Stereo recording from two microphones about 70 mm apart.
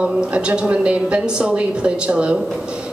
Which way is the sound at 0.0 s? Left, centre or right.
Centre.